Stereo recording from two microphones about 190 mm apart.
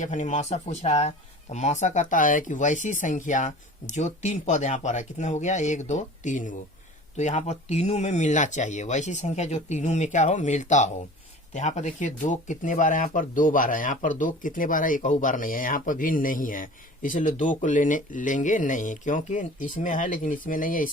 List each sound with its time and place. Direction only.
0.0 s speech: 40° left (ahead or behind)